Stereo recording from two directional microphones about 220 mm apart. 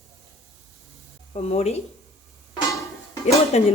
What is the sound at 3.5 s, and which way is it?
Speech, 30° left (ahead or behind).